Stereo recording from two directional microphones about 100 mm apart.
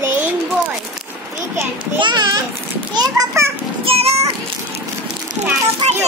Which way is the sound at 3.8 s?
90° right.